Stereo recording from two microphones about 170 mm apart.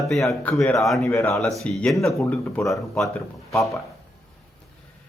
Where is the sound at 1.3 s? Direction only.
Centre (ahead or behind).